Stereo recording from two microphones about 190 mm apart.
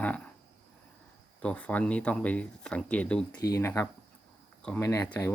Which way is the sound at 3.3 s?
20° left (ahead or behind).